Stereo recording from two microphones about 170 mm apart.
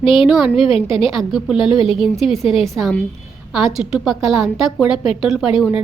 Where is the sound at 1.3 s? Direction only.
Centre (ahead or behind).